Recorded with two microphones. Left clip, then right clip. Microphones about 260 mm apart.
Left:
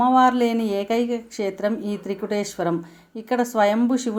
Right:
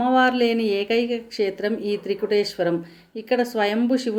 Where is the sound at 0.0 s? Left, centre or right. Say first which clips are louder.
Left 2 dB; centre.